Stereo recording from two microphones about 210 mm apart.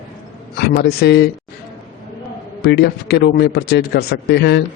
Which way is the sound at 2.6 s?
50° left (ahead or behind).